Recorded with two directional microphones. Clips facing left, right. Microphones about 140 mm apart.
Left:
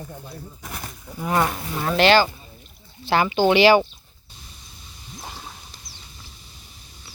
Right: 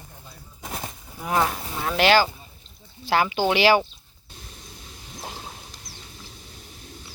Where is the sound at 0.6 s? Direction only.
20° right (ahead or behind).